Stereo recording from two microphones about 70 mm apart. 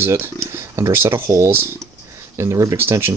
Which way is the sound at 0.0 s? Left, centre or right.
Right.